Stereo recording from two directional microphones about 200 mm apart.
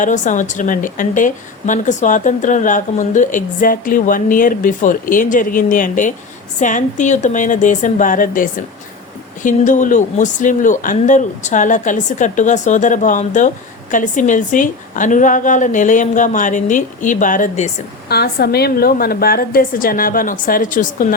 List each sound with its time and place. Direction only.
0.0 s a woman's voice: 40° left (ahead or behind)
18.1 s a woman's voice: 50° left (ahead or behind)